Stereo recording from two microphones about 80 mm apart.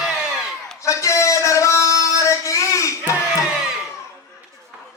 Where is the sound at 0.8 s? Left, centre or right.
Left.